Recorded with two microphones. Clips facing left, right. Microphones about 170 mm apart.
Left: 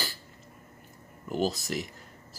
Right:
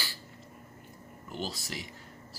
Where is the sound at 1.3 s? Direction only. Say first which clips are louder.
Left 9 dB; 45° left (ahead or behind).